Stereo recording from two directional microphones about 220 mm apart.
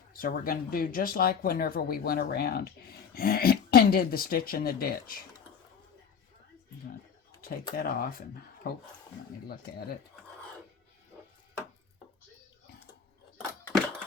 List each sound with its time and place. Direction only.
0.2 s speech: 40° left (ahead or behind)
7.4 s speech: 40° left (ahead or behind)